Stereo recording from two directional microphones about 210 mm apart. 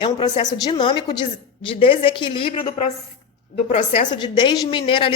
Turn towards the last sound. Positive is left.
turn(degrees=25)  # may be behind; listen again after turning